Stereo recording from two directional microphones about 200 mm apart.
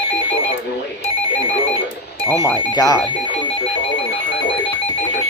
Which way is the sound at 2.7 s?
20° left (ahead or behind).